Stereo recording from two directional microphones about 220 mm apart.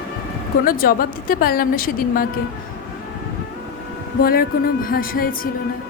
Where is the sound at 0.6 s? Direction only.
40° left (ahead or behind).